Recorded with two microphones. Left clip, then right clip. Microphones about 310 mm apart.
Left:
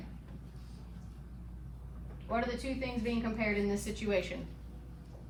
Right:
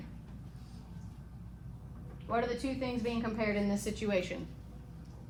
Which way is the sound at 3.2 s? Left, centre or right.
Centre.